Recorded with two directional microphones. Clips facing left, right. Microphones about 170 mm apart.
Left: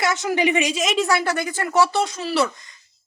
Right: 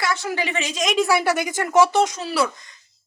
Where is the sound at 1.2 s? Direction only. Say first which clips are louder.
Right 2 dB; 15° right (ahead or behind).